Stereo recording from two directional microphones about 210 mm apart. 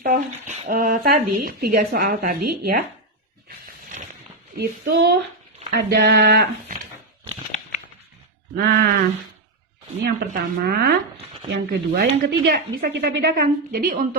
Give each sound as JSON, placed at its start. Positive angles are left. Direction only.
{"t": 0.0, "sound": "speech", "side_deg": -35}
{"t": 4.5, "sound": "speech", "side_deg": -45}
{"t": 8.5, "sound": "speech", "side_deg": -50}